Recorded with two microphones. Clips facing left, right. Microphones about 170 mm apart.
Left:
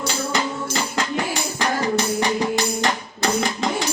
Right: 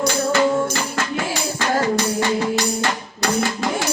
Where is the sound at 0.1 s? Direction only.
15° left (ahead or behind).